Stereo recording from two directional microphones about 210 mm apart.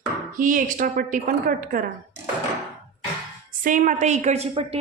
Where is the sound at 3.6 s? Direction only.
40° right (ahead or behind).